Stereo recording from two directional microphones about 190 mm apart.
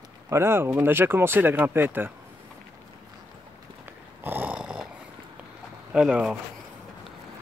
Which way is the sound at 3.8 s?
10° right (ahead or behind).